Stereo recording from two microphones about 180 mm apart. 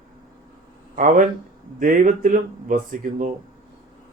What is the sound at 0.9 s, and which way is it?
Speech, 45° right (ahead or behind).